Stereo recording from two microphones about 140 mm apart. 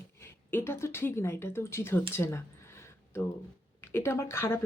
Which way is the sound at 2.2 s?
20° left (ahead or behind).